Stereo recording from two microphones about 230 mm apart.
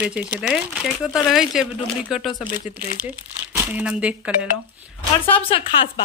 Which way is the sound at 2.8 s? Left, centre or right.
Right.